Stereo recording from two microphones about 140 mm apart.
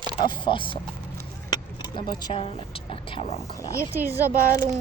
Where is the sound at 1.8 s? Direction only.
30° left (ahead or behind).